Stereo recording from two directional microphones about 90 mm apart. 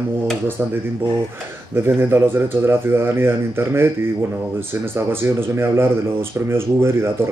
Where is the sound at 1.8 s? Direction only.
30° right (ahead or behind).